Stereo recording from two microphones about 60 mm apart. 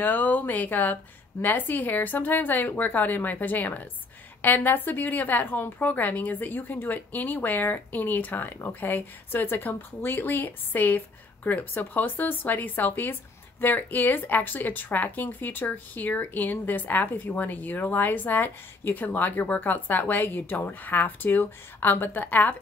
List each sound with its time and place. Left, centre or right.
0.0 s speech: left